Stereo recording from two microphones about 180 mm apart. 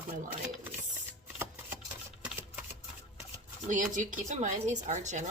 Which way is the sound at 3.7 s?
45° right (ahead or behind).